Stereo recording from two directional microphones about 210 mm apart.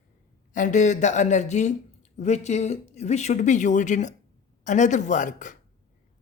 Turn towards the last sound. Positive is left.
turn(degrees=35)  # may be behind; listen again after turning